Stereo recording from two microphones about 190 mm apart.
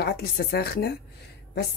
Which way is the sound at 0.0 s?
55° left (ahead or behind).